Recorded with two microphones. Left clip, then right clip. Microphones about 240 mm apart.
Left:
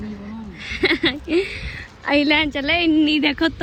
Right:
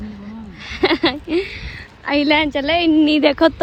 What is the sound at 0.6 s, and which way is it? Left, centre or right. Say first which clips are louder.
A woman's voice: right 2 dB; centre.